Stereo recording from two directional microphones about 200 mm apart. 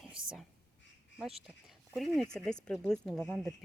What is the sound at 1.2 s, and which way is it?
A woman's voice, centre (ahead or behind).